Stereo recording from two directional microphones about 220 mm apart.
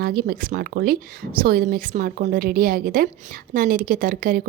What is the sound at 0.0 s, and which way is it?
A woman's voice, 40° right (ahead or behind).